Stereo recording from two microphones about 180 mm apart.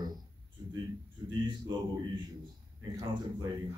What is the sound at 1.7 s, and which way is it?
Speech, 25° right (ahead or behind).